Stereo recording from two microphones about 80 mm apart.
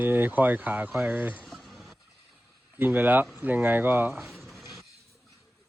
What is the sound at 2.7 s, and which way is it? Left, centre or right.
Speech, right.